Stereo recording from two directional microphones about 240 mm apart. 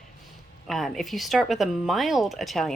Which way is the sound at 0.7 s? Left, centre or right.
Centre.